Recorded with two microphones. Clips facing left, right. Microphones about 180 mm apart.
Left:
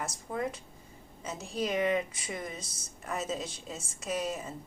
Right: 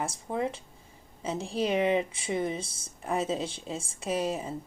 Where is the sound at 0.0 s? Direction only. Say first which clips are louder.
Right 4 dB; 25° right (ahead or behind).